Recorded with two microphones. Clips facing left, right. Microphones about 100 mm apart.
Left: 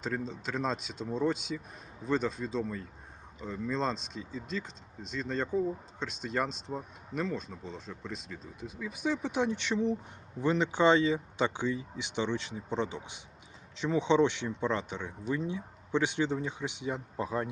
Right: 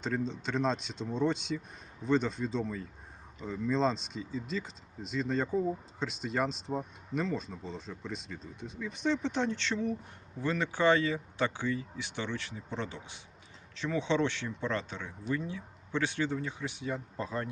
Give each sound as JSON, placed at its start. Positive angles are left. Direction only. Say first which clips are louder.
{"t": 0.0, "sound": "speech", "louder": "right 2 dB", "side_deg": 0}